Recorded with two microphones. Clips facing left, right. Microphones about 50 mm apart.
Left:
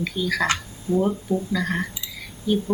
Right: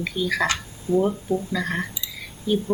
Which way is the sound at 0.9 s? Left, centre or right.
Left.